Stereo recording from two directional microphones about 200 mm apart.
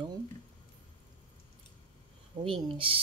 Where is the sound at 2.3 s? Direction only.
25° right (ahead or behind).